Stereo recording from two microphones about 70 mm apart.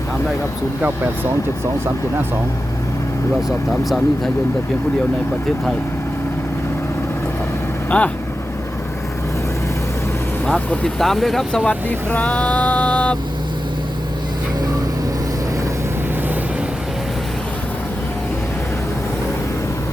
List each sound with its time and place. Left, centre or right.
3.7 s speech: centre
7.9 s speech: centre
10.4 s speech: centre
11.0 s speech: centre
11.6 s speech: left